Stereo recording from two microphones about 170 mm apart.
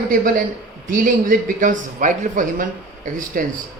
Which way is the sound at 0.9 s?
50° right (ahead or behind).